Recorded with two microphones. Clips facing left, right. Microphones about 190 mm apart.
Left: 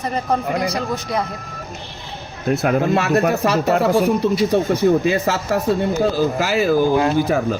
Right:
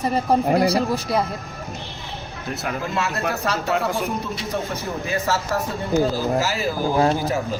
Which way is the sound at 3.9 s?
35° left (ahead or behind).